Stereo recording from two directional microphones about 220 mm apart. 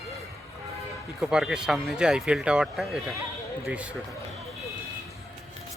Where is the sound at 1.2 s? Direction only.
5° right (ahead or behind).